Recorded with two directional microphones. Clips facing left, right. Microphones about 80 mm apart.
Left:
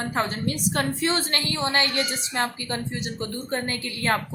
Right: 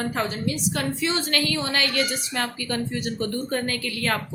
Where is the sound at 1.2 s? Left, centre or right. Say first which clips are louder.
Right 2 dB; left.